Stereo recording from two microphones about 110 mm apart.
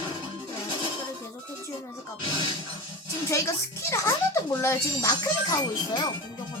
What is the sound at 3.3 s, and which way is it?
Speech, 25° left (ahead or behind).